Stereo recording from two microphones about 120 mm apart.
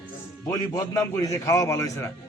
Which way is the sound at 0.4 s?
25° left (ahead or behind).